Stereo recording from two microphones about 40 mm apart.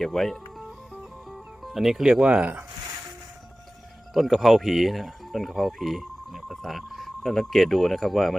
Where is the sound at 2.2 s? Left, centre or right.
Right.